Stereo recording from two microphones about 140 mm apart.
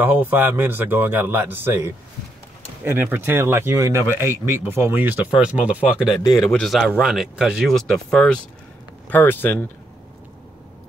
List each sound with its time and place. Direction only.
0.0 s speech: 15° right (ahead or behind)
6.2 s speech: 25° left (ahead or behind)
6.5 s speech: centre (ahead or behind)